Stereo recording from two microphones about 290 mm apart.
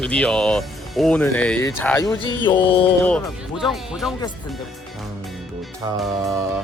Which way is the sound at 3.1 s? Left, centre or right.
Centre.